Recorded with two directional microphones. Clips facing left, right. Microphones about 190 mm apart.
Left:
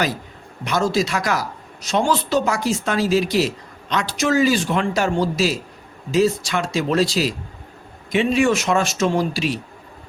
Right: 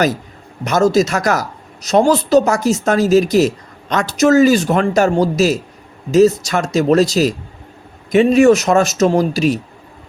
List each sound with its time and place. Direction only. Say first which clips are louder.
0.6 s a woman's voice: right 7 dB; 45° right (ahead or behind)